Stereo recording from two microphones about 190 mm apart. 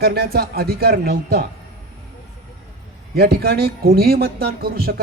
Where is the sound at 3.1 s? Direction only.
55° right (ahead or behind).